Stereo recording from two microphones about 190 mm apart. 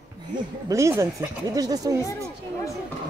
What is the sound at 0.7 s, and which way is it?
Speech, 15° right (ahead or behind).